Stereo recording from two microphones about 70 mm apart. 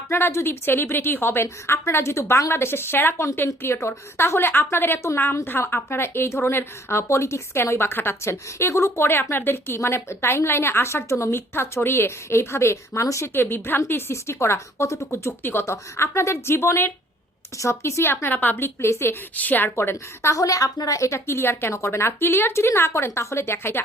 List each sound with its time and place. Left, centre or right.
0.1 s a woman's voice: left
13.3 s a woman's voice: left
19.4 s a woman's voice: left
19.7 s a woman's voice: left
20.3 s a woman's voice: left